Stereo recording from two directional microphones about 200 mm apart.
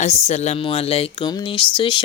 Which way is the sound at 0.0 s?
35° left (ahead or behind).